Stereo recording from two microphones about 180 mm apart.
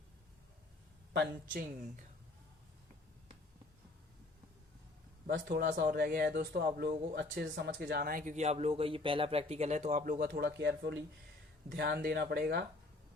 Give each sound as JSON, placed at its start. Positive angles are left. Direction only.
{"t": 1.1, "sound": "speech", "side_deg": -65}
{"t": 5.3, "sound": "speech", "side_deg": -75}
{"t": 12.0, "sound": "speech", "side_deg": -65}